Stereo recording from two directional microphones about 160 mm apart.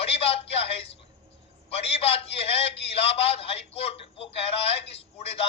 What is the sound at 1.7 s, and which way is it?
A man's voice, 35° left (ahead or behind).